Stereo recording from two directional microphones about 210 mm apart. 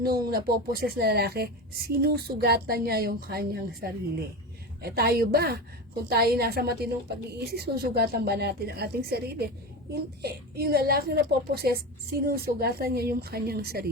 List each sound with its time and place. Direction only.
0.0 s a woman's voice: 45° right (ahead or behind)